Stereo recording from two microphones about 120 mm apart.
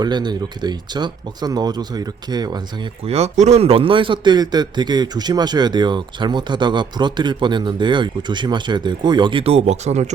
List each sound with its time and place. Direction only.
0.0 s speech: 35° right (ahead or behind)
3.1 s speech: 65° right (ahead or behind)